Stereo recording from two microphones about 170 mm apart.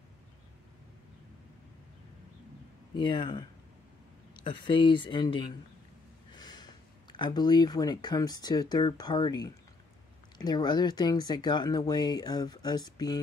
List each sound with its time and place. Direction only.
3.0 s speech: 25° left (ahead or behind)